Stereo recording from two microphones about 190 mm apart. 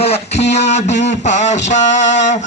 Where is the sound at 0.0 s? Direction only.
35° left (ahead or behind).